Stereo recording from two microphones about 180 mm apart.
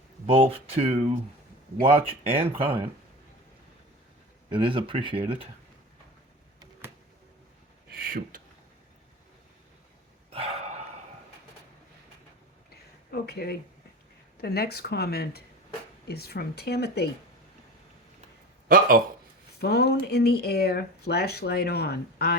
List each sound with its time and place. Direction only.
0.3 s speech: 30° right (ahead or behind)
4.4 s speech: 25° right (ahead or behind)
7.9 s speech: 55° right (ahead or behind)
10.3 s a sound: 35° right (ahead or behind)
13.1 s speech: 60° left (ahead or behind)
18.7 s speech: 50° right (ahead or behind)
19.5 s speech: 65° left (ahead or behind)